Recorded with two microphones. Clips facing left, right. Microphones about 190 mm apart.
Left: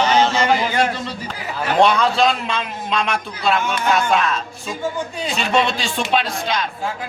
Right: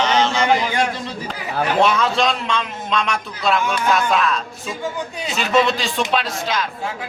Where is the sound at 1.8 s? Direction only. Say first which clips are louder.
Left 4 dB; 5° right (ahead or behind).